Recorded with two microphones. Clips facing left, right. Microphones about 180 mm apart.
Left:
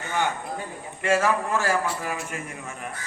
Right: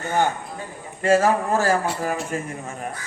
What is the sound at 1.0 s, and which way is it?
Speech, 35° right (ahead or behind).